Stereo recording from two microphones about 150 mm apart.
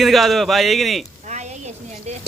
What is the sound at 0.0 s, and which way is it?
Speech, centre (ahead or behind).